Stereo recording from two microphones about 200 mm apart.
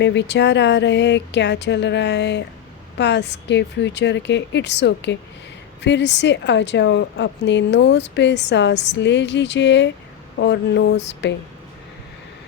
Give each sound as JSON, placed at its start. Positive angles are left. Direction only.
{"t": 0.0, "sound": "a woman's voice", "side_deg": 60}